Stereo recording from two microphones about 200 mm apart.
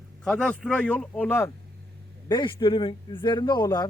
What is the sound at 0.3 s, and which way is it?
Speech, 5° left (ahead or behind).